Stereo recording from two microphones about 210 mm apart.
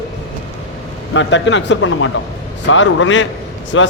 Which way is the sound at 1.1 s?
60° left (ahead or behind).